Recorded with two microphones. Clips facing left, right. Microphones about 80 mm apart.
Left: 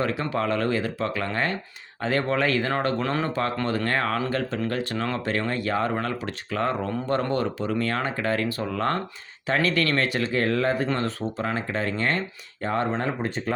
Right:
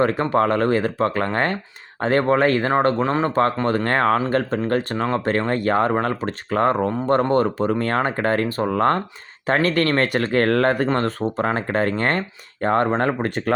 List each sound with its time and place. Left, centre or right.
0.0 s speech: right
3.0 s speech: right
3.2 s speech: right
10.8 s speech: right